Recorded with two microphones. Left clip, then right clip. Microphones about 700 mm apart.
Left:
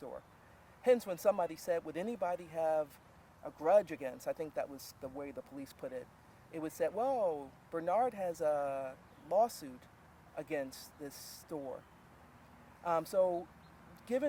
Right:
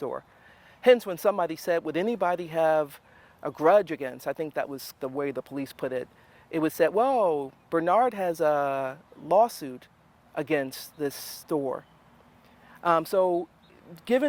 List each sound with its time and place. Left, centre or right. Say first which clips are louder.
0.8 s speech: right 10 dB; right
12.8 s speech: right 9 dB; right